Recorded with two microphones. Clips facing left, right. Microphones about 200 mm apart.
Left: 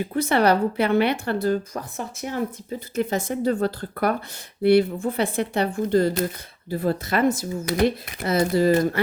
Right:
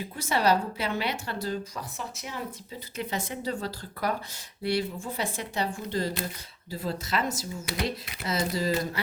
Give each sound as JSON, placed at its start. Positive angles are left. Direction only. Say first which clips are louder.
{"t": 0.0, "sound": "speech", "louder": "left 7 dB", "side_deg": 60}